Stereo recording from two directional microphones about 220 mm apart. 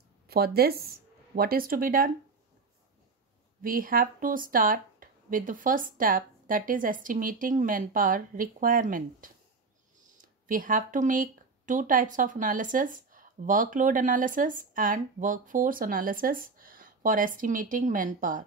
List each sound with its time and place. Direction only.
0.3 s speech: 45° right (ahead or behind)
3.6 s speech: 40° right (ahead or behind)